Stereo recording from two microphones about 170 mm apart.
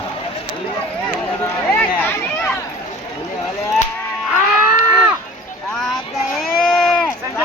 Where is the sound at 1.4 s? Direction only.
10° left (ahead or behind).